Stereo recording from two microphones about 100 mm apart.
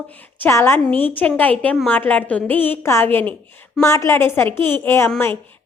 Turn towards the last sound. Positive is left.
turn(degrees=20)  # may be behind; listen again after turning